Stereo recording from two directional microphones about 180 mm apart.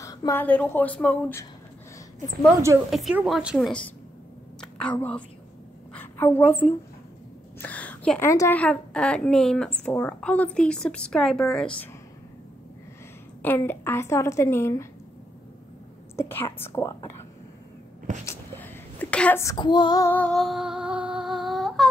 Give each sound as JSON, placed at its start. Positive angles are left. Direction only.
{"t": 0.0, "sound": "a woman's voice", "side_deg": 20}
{"t": 2.9, "sound": "a woman's voice", "side_deg": -5}
{"t": 5.9, "sound": "a sound", "side_deg": 15}
{"t": 7.6, "sound": "a sound", "side_deg": 10}
{"t": 8.3, "sound": "a woman's voice", "side_deg": 15}
{"t": 13.4, "sound": "a woman's voice", "side_deg": 10}
{"t": 16.2, "sound": "a woman's voice", "side_deg": 10}
{"t": 18.2, "sound": "a sound", "side_deg": 15}
{"t": 19.5, "sound": "female singing", "side_deg": 25}
{"t": 20.1, "sound": "humming", "side_deg": 5}